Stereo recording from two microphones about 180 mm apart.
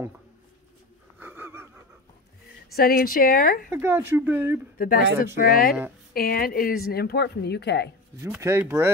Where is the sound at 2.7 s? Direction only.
55° left (ahead or behind).